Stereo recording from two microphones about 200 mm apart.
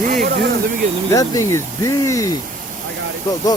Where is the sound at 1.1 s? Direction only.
15° left (ahead or behind).